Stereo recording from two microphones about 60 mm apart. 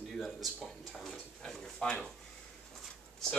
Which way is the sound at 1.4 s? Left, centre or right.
Centre.